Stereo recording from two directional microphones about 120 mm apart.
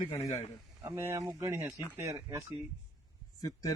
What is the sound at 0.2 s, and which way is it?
Speech, 35° left (ahead or behind).